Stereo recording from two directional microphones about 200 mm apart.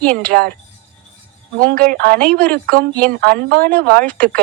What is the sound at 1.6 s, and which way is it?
Speech, 45° right (ahead or behind).